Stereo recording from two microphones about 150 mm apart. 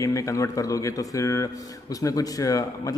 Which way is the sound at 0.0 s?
20° left (ahead or behind).